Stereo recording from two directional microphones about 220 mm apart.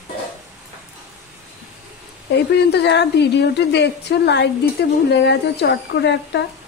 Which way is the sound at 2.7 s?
50° left (ahead or behind).